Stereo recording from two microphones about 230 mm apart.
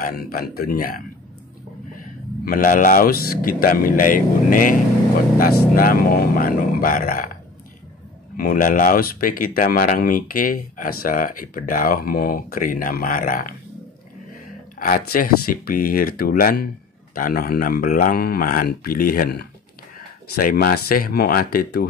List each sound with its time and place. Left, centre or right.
0.0 s speech: left
2.4 s speech: left
8.4 s speech: left
14.8 s speech: left